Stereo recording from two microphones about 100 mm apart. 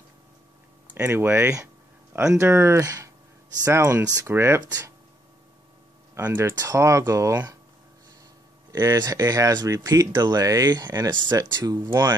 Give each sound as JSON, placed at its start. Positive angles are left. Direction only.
{"t": 0.9, "sound": "speech", "side_deg": -25}
{"t": 4.3, "sound": "speech", "side_deg": -25}
{"t": 6.1, "sound": "speech", "side_deg": -25}
{"t": 8.7, "sound": "speech", "side_deg": -40}